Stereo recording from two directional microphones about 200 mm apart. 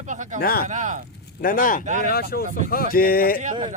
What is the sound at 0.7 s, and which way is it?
Speech, 40° right (ahead or behind).